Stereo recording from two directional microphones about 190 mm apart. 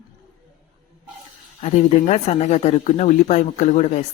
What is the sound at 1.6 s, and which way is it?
Speech, 35° left (ahead or behind).